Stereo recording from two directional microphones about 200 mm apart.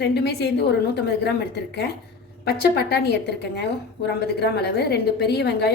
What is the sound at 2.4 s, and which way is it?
A woman's voice, 55° left (ahead or behind).